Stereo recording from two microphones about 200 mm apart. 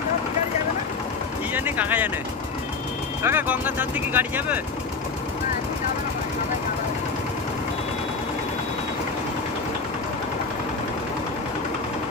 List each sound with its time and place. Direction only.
1.5 s music: 10° right (ahead or behind)
3.2 s speech: 10° right (ahead or behind)